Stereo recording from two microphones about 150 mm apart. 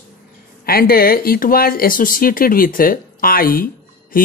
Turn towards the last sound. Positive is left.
turn(degrees=70)  # may be behind; listen again after turning